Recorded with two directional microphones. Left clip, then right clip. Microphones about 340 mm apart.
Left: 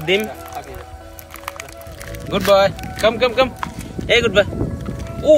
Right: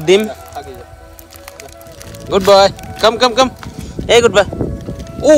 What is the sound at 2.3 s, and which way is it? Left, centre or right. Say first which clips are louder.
Speech: right 5 dB; centre.